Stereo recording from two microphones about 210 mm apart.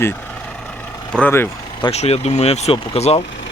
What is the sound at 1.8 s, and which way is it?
Speech, 30° left (ahead or behind).